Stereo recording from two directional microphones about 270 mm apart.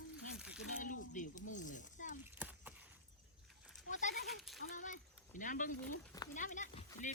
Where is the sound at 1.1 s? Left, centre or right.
Left.